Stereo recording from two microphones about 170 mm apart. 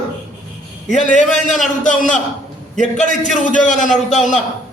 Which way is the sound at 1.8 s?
50° left (ahead or behind).